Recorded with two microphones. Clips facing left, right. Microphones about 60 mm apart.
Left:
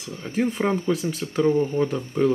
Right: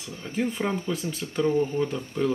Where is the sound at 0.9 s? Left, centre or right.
Centre.